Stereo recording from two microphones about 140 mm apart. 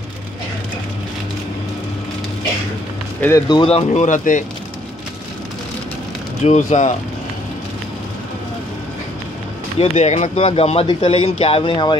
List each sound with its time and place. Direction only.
3.2 s speech: 20° left (ahead or behind)
3.4 s speech: 35° left (ahead or behind)
3.7 s speech: 55° left (ahead or behind)
6.4 s speech: 60° left (ahead or behind)
9.9 s speech: 55° left (ahead or behind); by 12.0 s 35° left (ahead or behind)